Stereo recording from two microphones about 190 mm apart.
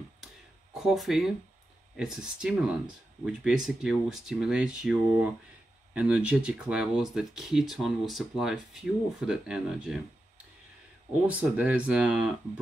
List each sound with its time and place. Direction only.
0.7 s speech: centre (ahead or behind)
11.2 s speech: 10° right (ahead or behind)